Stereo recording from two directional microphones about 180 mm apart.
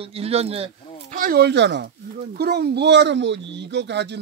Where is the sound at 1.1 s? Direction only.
50° right (ahead or behind).